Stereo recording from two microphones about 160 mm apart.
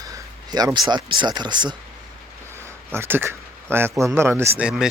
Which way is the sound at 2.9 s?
15° right (ahead or behind).